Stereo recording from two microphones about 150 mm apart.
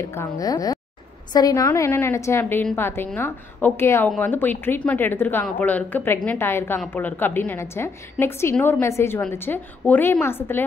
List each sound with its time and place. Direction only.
0.0 s a woman's voice: 15° left (ahead or behind)